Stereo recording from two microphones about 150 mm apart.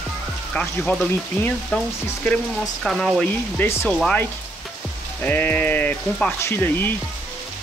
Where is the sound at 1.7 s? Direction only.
5° left (ahead or behind).